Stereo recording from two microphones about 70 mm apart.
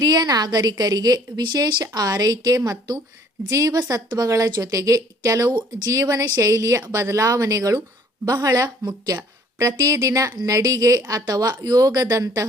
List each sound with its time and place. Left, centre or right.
0.0 s a woman's voice: right
3.5 s a woman's voice: right
5.5 s speech: right
5.9 s a woman's voice: right
8.2 s a woman's voice: right
10.3 s a woman's voice: right